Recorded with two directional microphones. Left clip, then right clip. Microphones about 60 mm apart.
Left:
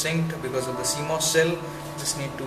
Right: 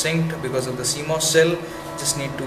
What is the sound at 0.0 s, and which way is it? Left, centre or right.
Speech, centre.